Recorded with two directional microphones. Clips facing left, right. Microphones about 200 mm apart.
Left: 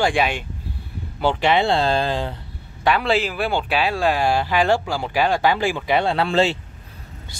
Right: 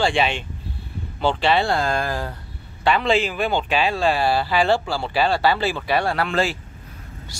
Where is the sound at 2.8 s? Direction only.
10° left (ahead or behind); by 6.6 s 25° left (ahead or behind).